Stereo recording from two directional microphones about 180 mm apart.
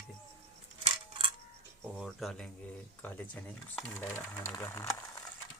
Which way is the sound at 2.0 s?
Centre (ahead or behind).